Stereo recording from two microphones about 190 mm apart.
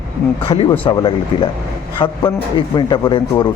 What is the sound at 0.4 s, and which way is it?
Speech, 30° left (ahead or behind).